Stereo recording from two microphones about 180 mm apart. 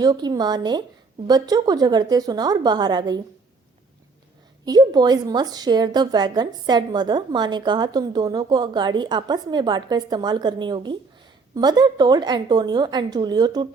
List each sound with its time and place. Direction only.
0.0 s a woman's voice: 20° right (ahead or behind)
4.6 s a woman's voice: 20° right (ahead or behind)